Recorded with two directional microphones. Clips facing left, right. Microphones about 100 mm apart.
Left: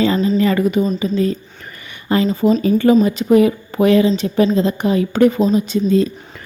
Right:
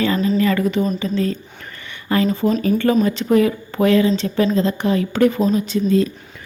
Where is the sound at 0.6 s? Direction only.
15° left (ahead or behind).